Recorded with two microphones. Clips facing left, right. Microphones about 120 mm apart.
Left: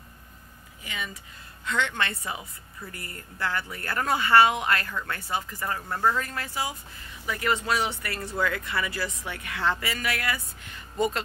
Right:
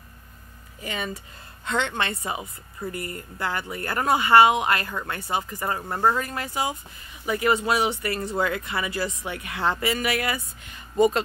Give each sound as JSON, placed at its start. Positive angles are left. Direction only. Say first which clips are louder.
{"t": 0.8, "sound": "speech", "louder": "right 6 dB", "side_deg": -40}
{"t": 1.7, "sound": "speech", "louder": "right 2 dB", "side_deg": -25}